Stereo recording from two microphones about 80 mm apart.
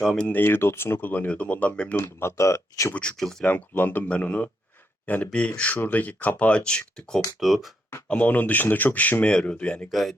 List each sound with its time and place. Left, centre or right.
0.2 s speech: centre
0.4 s speech: left
2.0 s speech: left
2.9 s speech: centre
7.3 s speech: centre
8.0 s speech: centre
9.9 s speech: centre